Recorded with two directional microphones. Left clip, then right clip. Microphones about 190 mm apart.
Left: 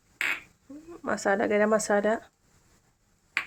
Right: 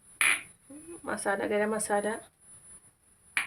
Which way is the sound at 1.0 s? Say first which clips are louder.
Left 5 dB; 40° left (ahead or behind).